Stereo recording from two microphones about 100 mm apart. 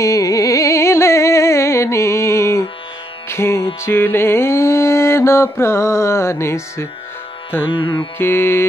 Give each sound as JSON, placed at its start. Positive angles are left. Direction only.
{"t": 0.0, "sound": "music", "side_deg": 35}